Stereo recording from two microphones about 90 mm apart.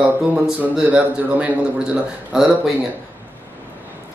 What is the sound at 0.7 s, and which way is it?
A man's voice, 15° right (ahead or behind).